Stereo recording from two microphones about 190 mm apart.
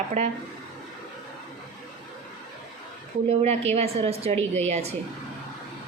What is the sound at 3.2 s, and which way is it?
A woman's voice, 35° right (ahead or behind).